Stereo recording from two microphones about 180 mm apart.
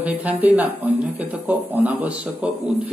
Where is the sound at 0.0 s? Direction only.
10° right (ahead or behind).